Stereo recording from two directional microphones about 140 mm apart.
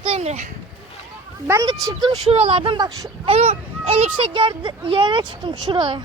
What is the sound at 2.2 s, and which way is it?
Speech, 45° right (ahead or behind).